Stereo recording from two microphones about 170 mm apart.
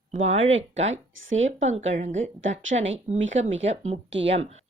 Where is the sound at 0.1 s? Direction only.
40° right (ahead or behind).